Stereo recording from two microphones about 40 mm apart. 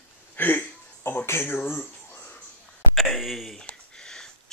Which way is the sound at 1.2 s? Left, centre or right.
Left.